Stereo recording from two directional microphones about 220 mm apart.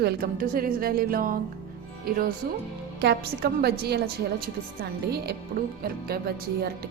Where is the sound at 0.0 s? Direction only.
45° right (ahead or behind).